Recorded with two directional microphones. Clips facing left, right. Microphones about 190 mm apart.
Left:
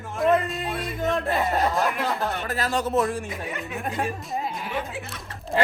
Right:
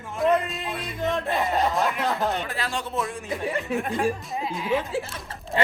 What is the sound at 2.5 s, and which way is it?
Speech, 40° left (ahead or behind).